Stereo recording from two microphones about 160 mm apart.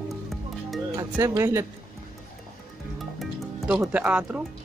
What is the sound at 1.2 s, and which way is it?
Speech, 20° right (ahead or behind).